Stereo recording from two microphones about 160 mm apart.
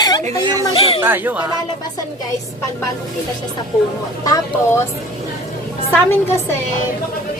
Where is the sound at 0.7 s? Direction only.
40° left (ahead or behind).